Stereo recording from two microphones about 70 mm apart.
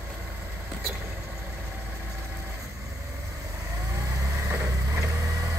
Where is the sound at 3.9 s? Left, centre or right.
Right.